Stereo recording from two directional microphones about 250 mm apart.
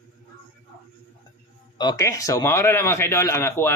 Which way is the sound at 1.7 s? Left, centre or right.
Centre.